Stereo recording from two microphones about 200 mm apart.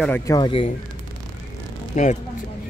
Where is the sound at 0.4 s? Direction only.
25° left (ahead or behind).